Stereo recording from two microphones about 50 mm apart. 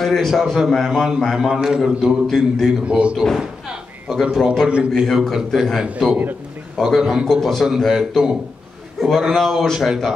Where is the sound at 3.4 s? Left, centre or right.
Centre.